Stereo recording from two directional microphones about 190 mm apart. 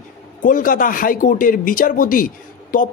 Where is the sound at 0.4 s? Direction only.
45° left (ahead or behind).